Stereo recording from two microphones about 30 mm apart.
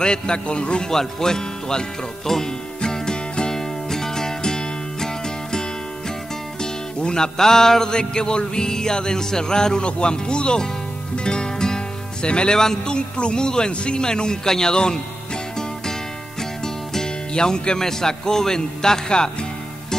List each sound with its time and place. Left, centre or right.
0.0 s speech: left
0.8 s music: centre
6.6 s music: left
7.3 s music: centre
12.3 s speech: left
12.8 s music: left
16.6 s speech: centre